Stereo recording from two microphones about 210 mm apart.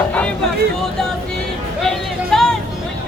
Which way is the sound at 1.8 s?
Centre (ahead or behind).